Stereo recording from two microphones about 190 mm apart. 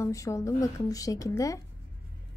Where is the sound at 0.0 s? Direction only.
15° left (ahead or behind).